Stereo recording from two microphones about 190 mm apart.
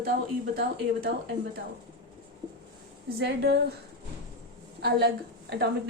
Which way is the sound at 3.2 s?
60° right (ahead or behind).